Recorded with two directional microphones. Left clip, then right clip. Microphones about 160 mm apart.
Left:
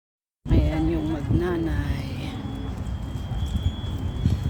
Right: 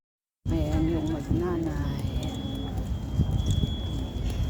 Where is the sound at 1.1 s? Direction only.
30° left (ahead or behind).